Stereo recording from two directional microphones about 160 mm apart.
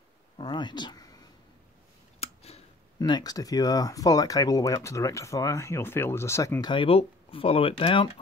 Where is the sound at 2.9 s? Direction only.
25° left (ahead or behind).